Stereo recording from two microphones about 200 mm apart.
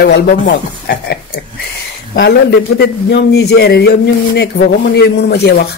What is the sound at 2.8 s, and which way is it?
Speech, 55° left (ahead or behind).